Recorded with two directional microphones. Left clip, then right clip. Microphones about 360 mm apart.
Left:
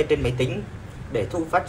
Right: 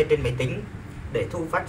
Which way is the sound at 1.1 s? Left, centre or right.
Left.